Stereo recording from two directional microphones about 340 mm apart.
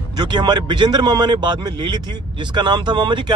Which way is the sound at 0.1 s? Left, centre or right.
Centre.